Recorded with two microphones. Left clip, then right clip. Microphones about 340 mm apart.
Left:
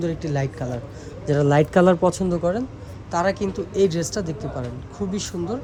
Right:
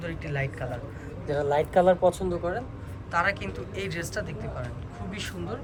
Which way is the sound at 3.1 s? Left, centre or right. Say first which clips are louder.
Left 4 dB; centre.